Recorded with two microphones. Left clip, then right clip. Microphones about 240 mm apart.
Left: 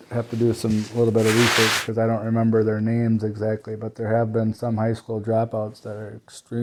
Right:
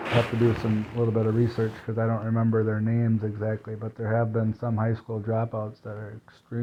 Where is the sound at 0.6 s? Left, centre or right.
Left.